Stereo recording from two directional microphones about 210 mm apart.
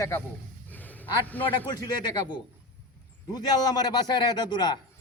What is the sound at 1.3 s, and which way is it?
Speech, 10° left (ahead or behind).